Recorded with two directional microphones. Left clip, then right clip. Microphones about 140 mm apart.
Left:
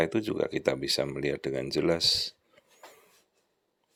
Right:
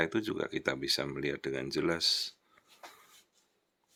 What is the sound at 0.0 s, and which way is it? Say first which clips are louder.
Speech: left 4 dB; 20° left (ahead or behind).